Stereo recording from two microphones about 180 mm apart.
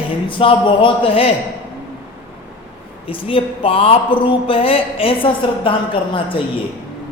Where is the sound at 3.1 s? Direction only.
30° left (ahead or behind).